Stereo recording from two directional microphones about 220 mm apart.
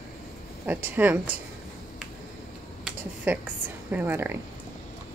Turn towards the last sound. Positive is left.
turn(degrees=-10)  # may be behind; listen again after turning